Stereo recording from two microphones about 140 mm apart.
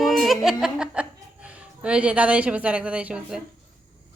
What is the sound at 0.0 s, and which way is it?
Speech, centre (ahead or behind).